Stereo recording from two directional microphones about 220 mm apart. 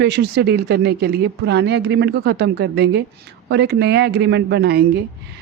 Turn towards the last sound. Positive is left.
turn(degrees=-50)  # may be behind; listen again after turning